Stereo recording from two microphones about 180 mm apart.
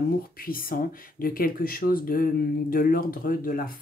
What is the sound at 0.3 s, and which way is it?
Speech, 55° left (ahead or behind).